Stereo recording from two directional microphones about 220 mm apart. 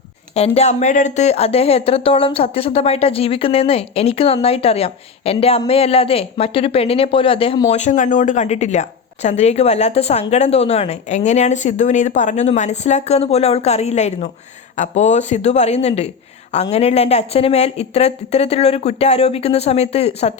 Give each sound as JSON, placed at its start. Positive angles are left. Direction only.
{"t": 0.3, "sound": "speech", "side_deg": 30}